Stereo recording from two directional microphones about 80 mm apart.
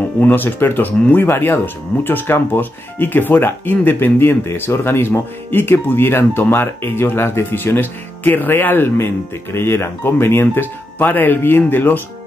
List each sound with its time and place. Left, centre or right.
0.2 s speech: left